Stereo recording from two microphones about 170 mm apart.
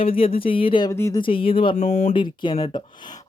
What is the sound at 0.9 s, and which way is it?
Speech, 15° left (ahead or behind).